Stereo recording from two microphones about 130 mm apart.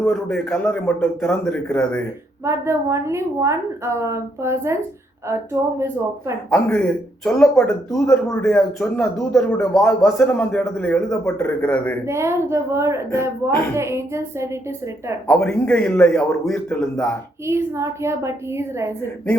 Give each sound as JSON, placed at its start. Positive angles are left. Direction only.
{"t": 0.0, "sound": "speech", "side_deg": 5}
{"t": 2.4, "sound": "a woman's voice", "side_deg": -20}
{"t": 6.5, "sound": "speech", "side_deg": 10}
{"t": 12.0, "sound": "a woman's voice", "side_deg": -20}
{"t": 15.3, "sound": "speech", "side_deg": 5}
{"t": 17.4, "sound": "a woman's voice", "side_deg": -20}